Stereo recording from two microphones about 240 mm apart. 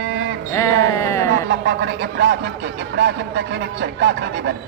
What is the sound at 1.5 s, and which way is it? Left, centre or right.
Speech, right.